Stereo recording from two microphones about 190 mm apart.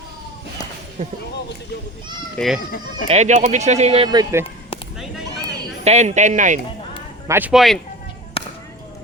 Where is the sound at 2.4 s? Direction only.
5° left (ahead or behind).